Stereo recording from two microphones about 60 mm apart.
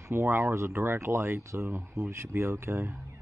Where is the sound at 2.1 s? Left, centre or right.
Right.